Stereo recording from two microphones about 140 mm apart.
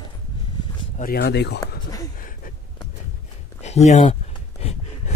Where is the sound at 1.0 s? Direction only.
90° left.